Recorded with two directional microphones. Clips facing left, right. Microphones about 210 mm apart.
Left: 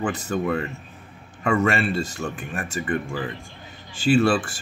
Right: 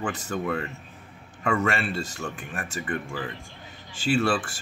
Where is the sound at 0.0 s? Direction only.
20° left (ahead or behind).